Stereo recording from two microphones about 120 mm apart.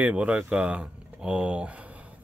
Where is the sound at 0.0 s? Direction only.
10° right (ahead or behind).